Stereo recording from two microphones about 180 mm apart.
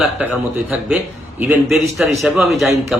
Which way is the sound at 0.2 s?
5° right (ahead or behind).